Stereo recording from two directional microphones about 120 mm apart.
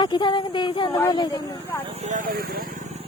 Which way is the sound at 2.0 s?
80° right.